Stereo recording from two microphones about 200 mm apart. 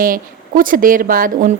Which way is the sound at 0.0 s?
45° right (ahead or behind).